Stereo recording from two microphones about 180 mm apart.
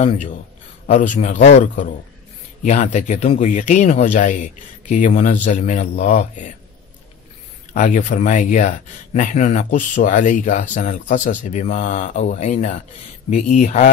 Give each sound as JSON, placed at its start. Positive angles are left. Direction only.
{"t": 0.0, "sound": "speech", "side_deg": 40}
{"t": 7.7, "sound": "speech", "side_deg": 45}